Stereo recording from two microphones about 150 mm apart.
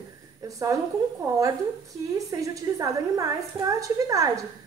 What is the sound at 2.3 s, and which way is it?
A woman's voice, 20° right (ahead or behind).